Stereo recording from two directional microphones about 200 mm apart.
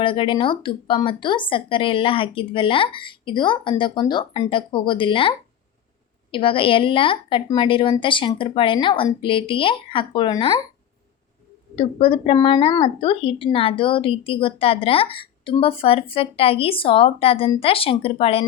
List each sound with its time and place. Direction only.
0.0 s speech: 25° left (ahead or behind)
6.3 s speech: 25° left (ahead or behind)
11.8 s speech: 30° left (ahead or behind)